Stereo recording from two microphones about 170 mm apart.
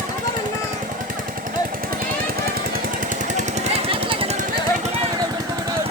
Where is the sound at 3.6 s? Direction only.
30° right (ahead or behind).